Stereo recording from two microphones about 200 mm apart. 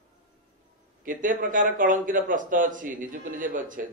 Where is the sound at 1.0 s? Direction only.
40° right (ahead or behind).